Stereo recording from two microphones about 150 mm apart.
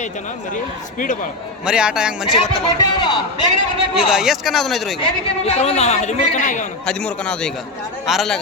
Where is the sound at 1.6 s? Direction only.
5° right (ahead or behind).